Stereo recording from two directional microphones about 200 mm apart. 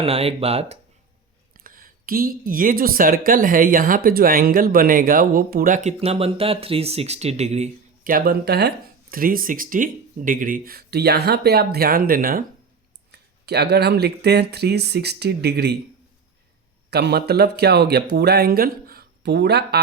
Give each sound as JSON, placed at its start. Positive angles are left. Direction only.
{"t": 0.0, "sound": "speech", "side_deg": -30}
{"t": 1.5, "sound": "a woman's voice", "side_deg": -45}
{"t": 13.1, "sound": "speech", "side_deg": -55}
{"t": 16.9, "sound": "a woman's voice", "side_deg": -55}